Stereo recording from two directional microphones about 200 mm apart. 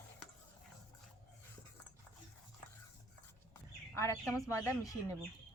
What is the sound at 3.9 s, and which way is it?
Speech, 15° left (ahead or behind).